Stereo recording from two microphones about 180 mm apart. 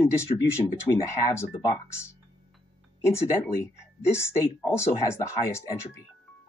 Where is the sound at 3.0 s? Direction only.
15° left (ahead or behind).